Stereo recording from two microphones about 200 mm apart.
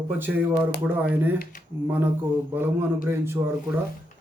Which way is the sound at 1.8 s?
10° right (ahead or behind).